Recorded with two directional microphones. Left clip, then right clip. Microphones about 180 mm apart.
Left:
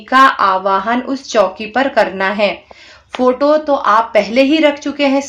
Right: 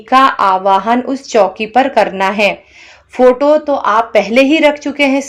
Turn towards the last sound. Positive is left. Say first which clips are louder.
# right 2 dB
turn(degrees=-20)  # may be behind; listen again after turning